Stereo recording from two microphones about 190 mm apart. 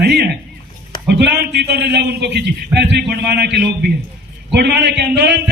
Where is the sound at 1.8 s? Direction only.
60° right (ahead or behind).